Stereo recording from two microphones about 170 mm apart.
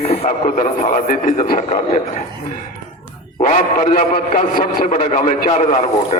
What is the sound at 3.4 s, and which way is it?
A man's voice, 45° left (ahead or behind).